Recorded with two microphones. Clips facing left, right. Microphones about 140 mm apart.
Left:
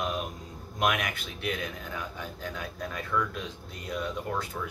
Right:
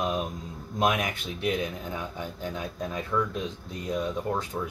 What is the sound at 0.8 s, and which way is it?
Speech, 25° right (ahead or behind).